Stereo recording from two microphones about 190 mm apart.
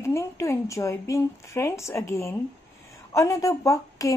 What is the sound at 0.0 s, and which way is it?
A woman's voice, 15° left (ahead or behind).